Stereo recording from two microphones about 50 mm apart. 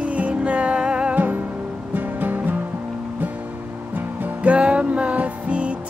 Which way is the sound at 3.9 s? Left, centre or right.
Right.